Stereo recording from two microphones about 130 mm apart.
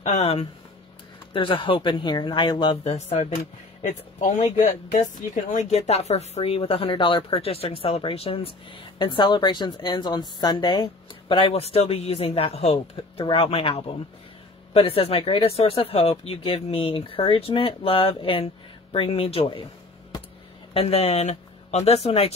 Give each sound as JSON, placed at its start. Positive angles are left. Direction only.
{"t": 0.0, "sound": "speech", "side_deg": 55}
{"t": 2.8, "sound": "speech", "side_deg": 50}
{"t": 20.7, "sound": "speech", "side_deg": 50}